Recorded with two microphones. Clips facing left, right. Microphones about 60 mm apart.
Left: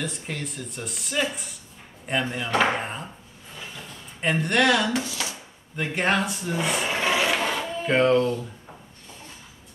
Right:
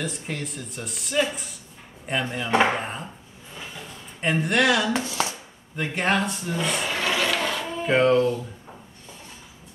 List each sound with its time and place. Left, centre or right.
0.0 s speech: centre
4.2 s speech: centre
4.9 s speech: right
5.8 s speech: centre
6.9 s music: left
7.8 s speech: centre